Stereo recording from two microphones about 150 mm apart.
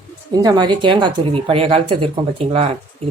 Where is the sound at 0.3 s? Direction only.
30° right (ahead or behind).